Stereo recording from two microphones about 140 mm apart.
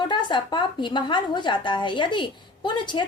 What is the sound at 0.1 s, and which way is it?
A woman's voice, 35° left (ahead or behind).